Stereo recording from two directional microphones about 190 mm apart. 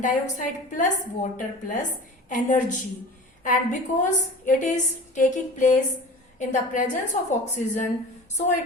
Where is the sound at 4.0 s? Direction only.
40° left (ahead or behind).